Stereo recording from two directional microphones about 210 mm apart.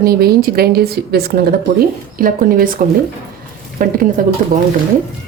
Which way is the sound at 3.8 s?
40° right (ahead or behind).